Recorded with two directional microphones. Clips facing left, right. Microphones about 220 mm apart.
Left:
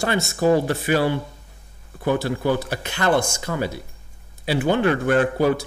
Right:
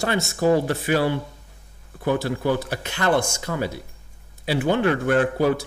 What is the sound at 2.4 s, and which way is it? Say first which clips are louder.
Speech: left 1 dB; 40° left (ahead or behind).